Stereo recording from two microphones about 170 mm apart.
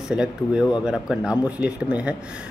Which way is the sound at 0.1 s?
5° right (ahead or behind).